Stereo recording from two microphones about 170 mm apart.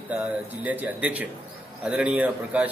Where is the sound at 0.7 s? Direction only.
10° right (ahead or behind).